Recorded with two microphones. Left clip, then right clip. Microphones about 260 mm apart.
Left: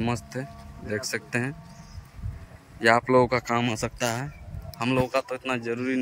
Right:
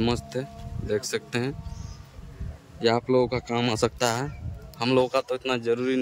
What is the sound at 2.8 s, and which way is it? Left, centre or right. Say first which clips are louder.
Speech: left 3 dB; centre.